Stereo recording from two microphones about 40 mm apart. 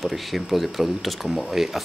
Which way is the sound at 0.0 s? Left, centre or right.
Centre.